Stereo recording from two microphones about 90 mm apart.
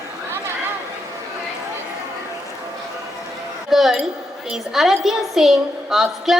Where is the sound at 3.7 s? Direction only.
5° right (ahead or behind).